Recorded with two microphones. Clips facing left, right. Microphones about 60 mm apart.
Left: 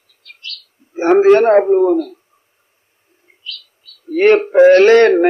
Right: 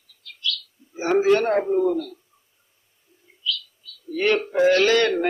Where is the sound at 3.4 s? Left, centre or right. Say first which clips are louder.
Right 5 dB; left.